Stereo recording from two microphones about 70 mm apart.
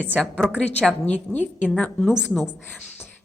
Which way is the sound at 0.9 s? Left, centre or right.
Centre.